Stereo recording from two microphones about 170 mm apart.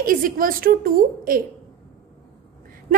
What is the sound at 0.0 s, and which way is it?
A woman's voice, 55° right (ahead or behind).